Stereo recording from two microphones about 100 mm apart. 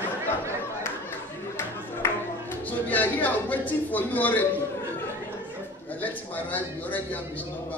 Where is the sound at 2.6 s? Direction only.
15° left (ahead or behind).